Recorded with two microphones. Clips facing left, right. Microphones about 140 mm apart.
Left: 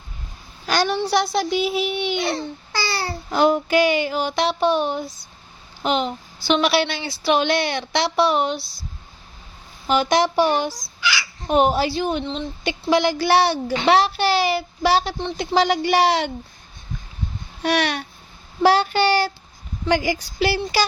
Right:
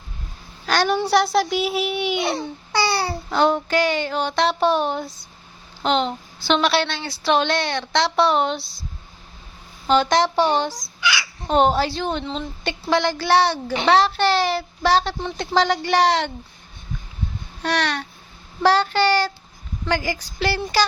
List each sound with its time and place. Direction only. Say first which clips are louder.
0.7 s a sound: right 1 dB; centre (ahead or behind)
0.9 s a woman's voice: right 2 dB; centre (ahead or behind)
3.2 s a woman's voice: left 2 dB; 10° left (ahead or behind)
9.8 s a woman's voice: right 1 dB; 5° left (ahead or behind)
17.6 s a woman's voice: left 2 dB; 10° left (ahead or behind)